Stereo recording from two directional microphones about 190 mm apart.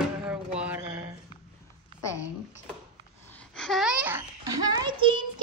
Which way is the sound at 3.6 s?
Centre (ahead or behind).